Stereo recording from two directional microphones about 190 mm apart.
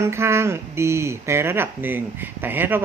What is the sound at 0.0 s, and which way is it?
A woman's voice, 15° right (ahead or behind).